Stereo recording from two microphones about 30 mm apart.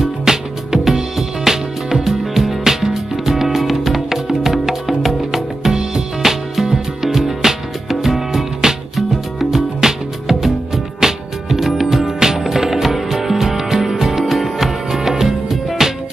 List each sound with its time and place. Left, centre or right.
0.0 s music: centre